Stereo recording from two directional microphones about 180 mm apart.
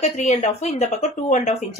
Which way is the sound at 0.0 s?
40° left (ahead or behind).